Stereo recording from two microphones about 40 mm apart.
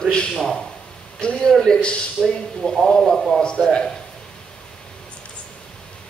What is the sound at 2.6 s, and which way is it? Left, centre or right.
Speech, left.